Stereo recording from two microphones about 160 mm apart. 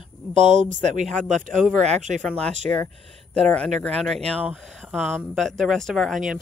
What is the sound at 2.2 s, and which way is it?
Speech, 5° left (ahead or behind).